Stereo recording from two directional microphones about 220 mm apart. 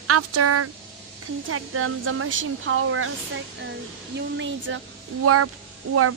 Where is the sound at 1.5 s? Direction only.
75° right (ahead or behind).